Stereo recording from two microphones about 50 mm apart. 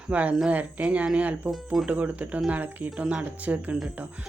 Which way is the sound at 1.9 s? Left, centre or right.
Right.